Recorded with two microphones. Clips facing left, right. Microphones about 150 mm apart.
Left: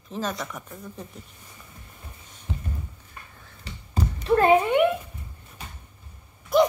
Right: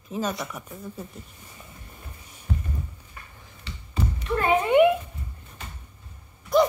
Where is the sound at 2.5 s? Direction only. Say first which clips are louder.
Right 4 dB; 20° left (ahead or behind).